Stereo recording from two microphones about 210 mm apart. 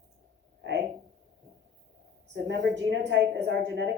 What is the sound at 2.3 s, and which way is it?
A woman's voice, 60° right (ahead or behind).